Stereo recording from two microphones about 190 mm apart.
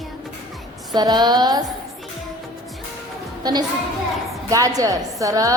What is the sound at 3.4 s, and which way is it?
Speech, 20° right (ahead or behind).